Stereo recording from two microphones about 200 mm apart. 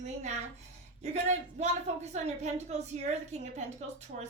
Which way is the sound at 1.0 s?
35° right (ahead or behind).